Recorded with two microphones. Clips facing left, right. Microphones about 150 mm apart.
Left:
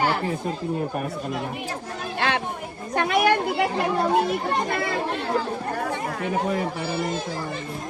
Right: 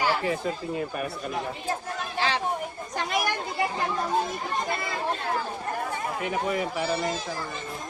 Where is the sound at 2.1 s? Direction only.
55° left (ahead or behind).